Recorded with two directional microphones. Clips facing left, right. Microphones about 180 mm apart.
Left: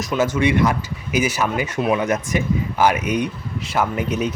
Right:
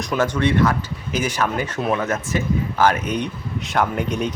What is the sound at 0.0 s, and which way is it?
Speech, 5° left (ahead or behind).